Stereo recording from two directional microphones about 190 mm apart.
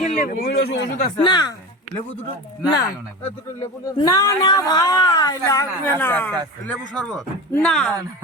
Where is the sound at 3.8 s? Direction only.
20° left (ahead or behind); by 7.9 s centre (ahead or behind).